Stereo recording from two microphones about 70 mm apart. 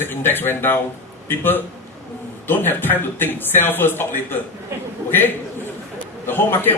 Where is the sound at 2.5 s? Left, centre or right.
Left.